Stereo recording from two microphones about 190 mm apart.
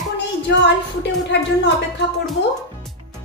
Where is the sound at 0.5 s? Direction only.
65° left (ahead or behind).